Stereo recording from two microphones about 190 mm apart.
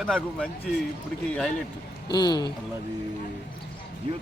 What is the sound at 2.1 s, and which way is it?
Speech, 20° left (ahead or behind).